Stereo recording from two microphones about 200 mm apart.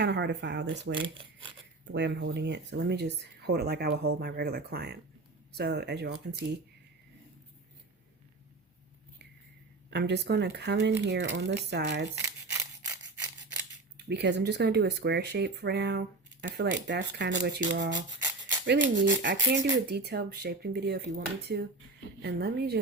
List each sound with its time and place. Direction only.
0.0 s speech: 60° right (ahead or behind)
0.9 s speech: 25° right (ahead or behind)
1.8 s speech: 65° right (ahead or behind)
9.9 s speech: 60° right (ahead or behind)
12.1 s a sound: 15° right (ahead or behind)
13.9 s speech: 55° right (ahead or behind)
19.9 s speech: 55° right (ahead or behind)